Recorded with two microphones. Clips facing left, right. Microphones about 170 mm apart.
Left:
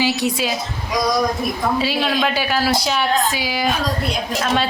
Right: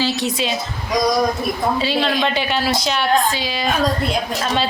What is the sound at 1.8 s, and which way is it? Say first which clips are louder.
A woman's voice: right 1 dB; 5° left (ahead or behind).